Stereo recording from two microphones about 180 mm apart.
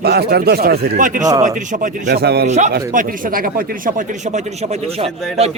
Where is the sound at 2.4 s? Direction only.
40° right (ahead or behind).